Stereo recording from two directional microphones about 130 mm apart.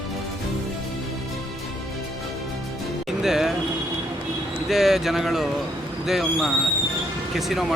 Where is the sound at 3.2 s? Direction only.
5° right (ahead or behind).